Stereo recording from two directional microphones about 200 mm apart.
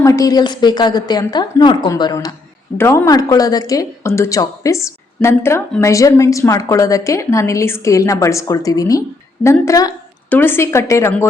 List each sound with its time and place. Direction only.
0.0 s a woman's voice: 15° left (ahead or behind)